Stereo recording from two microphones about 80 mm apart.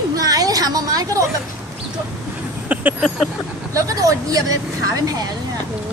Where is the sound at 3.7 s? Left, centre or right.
Right.